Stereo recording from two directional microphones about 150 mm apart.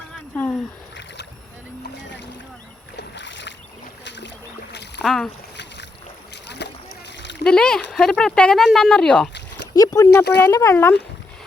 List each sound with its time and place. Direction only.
0.1 s a sound: 10° left (ahead or behind)
5.0 s speech: centre (ahead or behind)
7.4 s speech: 5° left (ahead or behind)
9.7 s speech: 25° left (ahead or behind)